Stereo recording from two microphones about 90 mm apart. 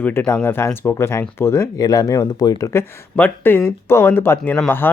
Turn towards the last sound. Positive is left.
turn(degrees=25)  # may be behind; listen again after turning